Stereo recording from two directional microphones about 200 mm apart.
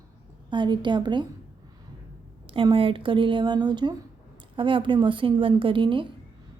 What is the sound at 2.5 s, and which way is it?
A woman's voice, 25° right (ahead or behind).